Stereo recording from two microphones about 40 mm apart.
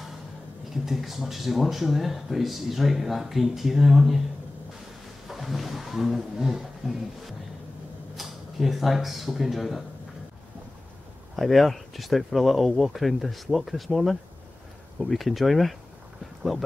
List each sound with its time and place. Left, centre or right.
0.8 s speech: centre
5.3 s a sound: centre
8.2 s speech: centre
11.3 s speech: centre